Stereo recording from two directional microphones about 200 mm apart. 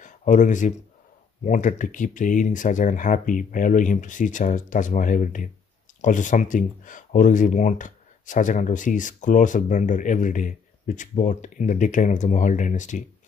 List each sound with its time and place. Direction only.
0.0 s speech: 40° left (ahead or behind)